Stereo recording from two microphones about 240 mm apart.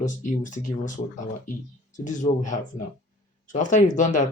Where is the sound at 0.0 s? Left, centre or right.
Left.